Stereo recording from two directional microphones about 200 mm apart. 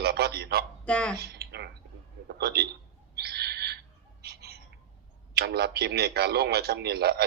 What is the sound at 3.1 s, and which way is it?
Bird, 55° right (ahead or behind).